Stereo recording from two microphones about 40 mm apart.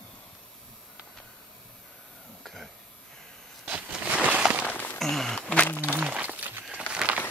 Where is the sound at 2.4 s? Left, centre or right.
Centre.